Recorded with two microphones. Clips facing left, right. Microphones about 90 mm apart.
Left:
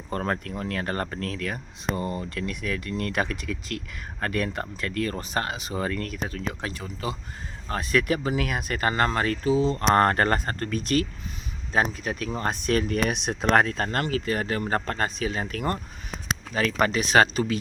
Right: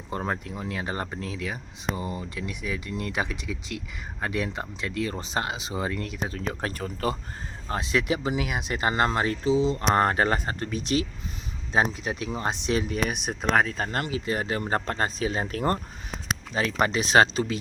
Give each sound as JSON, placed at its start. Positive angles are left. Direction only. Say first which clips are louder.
{"t": 0.1, "sound": "speech", "louder": "left 2 dB", "side_deg": -15}
{"t": 6.3, "sound": "speech", "louder": "right 1 dB", "side_deg": -35}
{"t": 7.7, "sound": "speech", "louder": "left 2 dB", "side_deg": -20}
{"t": 13.1, "sound": "speech", "louder": "left 3 dB", "side_deg": 0}